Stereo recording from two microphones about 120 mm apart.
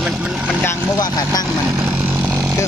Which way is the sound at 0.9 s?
35° left (ahead or behind).